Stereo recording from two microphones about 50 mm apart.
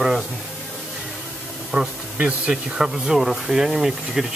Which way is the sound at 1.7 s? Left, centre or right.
Right.